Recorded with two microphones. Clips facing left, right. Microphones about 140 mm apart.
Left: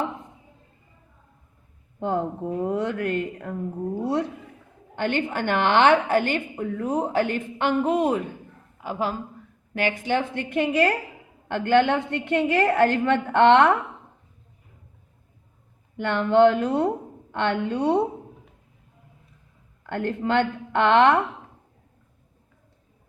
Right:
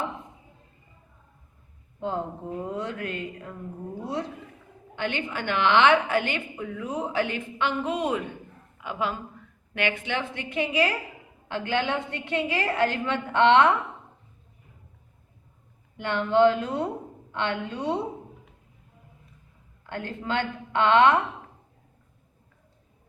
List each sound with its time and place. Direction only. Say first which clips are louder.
2.0 s a woman's voice: left 5 dB; 60° left (ahead or behind)
4.9 s a woman's voice: left 5 dB; 50° left (ahead or behind)
16.0 s a woman's voice: left 3 dB; 55° left (ahead or behind)
17.3 s a woman's voice: left 5 dB; 55° left (ahead or behind)
19.8 s a woman's voice: left 8 dB; 55° left (ahead or behind)